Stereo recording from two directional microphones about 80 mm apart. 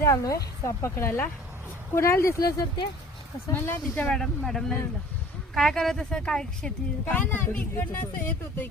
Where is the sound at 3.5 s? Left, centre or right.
Left.